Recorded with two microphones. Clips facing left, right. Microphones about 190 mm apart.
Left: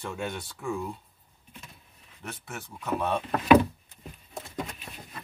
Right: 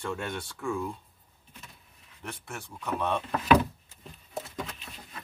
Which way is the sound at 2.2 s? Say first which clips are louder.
Left 1 dB; centre (ahead or behind).